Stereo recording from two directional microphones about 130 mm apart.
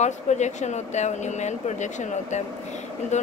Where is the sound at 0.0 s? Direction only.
65° left (ahead or behind).